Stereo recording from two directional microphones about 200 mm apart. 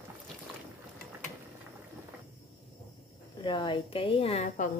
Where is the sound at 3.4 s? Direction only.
25° left (ahead or behind).